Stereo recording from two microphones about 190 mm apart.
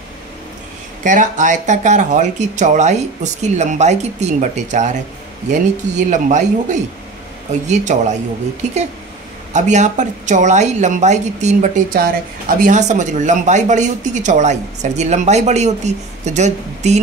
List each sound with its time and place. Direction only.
1.0 s speech: 40° right (ahead or behind)
9.5 s speech: 40° right (ahead or behind)